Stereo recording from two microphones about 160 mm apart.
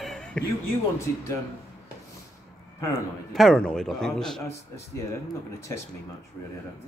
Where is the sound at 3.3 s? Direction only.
Centre (ahead or behind).